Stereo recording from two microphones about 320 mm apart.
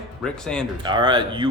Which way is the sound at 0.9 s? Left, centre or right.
Centre.